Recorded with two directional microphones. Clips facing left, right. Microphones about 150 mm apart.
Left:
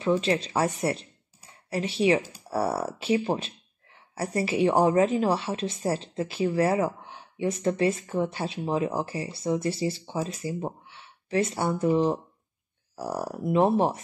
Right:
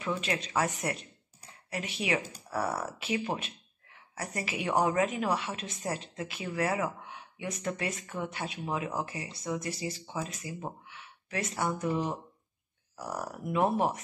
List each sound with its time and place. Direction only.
0.0 s speech: 30° left (ahead or behind)